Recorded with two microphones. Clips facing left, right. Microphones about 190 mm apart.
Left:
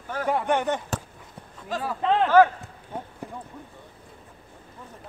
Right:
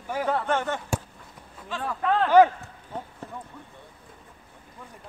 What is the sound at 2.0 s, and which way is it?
Speech, 20° left (ahead or behind).